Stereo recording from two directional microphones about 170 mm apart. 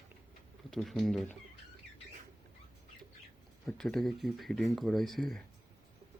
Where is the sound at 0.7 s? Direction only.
Centre (ahead or behind).